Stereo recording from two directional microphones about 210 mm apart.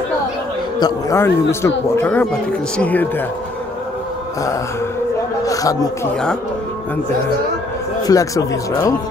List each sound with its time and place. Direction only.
0.7 s a man's voice: 15° left (ahead or behind)
5.4 s a sound: 15° left (ahead or behind)
8.1 s speech: 15° left (ahead or behind)